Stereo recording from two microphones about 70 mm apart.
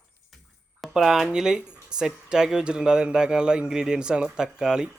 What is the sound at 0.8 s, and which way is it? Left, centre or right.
Speech, centre.